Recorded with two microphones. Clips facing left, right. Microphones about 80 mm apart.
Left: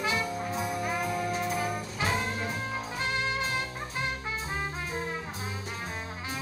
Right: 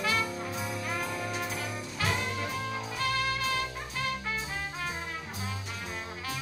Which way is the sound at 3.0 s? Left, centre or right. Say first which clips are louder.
Right 1 dB; left.